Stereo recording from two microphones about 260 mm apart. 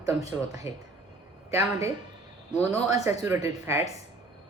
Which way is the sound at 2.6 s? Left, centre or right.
Centre.